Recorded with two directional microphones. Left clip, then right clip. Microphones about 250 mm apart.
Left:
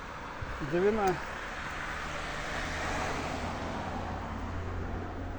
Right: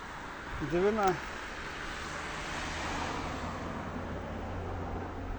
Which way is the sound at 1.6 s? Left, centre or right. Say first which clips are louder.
Left 3 dB; left.